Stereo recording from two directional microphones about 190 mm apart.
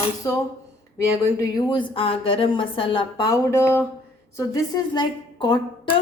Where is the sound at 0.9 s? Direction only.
15° left (ahead or behind).